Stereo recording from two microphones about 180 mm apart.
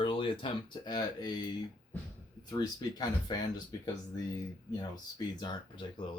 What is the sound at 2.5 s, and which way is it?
Speech, 20° left (ahead or behind).